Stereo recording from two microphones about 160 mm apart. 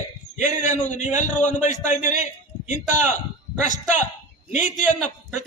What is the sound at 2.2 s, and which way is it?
A man's voice, 50° left (ahead or behind).